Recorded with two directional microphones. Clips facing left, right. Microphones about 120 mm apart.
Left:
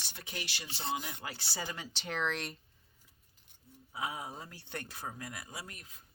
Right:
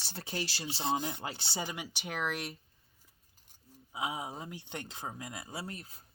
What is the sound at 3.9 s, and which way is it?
Speech, 20° right (ahead or behind).